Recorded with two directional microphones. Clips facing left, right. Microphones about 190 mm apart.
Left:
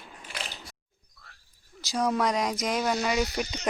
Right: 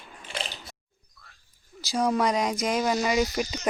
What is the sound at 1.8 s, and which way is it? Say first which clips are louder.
Speech: right 2 dB; centre (ahead or behind).